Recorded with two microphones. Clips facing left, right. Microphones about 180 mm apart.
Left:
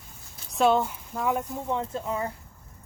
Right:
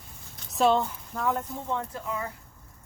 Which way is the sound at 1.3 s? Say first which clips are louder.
Left 2 dB; 15° left (ahead or behind).